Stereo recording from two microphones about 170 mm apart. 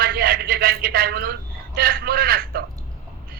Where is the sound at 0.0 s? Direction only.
60° right (ahead or behind).